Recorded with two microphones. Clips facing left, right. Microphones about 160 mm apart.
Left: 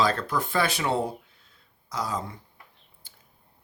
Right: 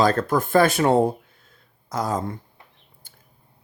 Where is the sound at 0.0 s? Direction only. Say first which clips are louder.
Right 6 dB; 45° right (ahead or behind).